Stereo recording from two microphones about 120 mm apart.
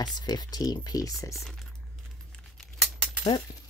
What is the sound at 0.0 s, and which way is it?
Speech, 35° left (ahead or behind).